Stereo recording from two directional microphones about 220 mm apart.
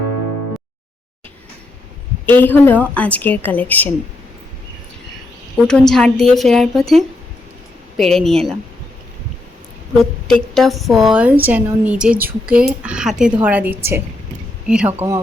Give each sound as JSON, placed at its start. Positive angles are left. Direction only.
{"t": 2.2, "sound": "a woman's voice", "side_deg": 10}
{"t": 5.5, "sound": "a woman's voice", "side_deg": 5}
{"t": 10.0, "sound": "a woman's voice", "side_deg": 5}